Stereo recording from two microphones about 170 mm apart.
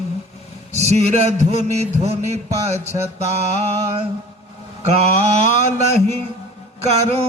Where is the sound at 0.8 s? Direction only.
40° right (ahead or behind).